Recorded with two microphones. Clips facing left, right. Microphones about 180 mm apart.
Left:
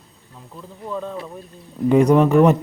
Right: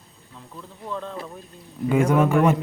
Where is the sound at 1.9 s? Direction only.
35° left (ahead or behind).